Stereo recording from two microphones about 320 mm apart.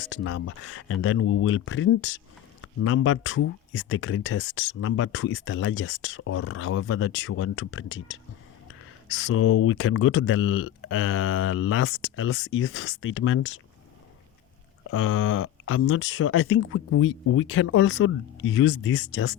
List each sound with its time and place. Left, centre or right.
0.0 s speech: left
14.8 s speech: left